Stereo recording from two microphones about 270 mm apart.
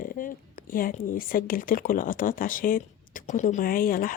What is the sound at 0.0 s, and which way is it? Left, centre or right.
Speech, left.